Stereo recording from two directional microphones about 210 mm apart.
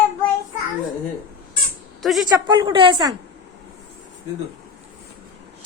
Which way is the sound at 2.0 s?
Centre (ahead or behind).